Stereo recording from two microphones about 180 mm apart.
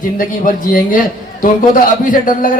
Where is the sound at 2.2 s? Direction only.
50° left (ahead or behind).